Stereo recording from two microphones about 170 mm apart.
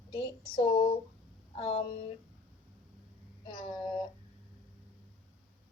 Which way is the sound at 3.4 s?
25° left (ahead or behind).